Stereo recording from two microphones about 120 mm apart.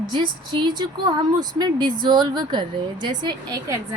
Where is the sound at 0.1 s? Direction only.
40° right (ahead or behind).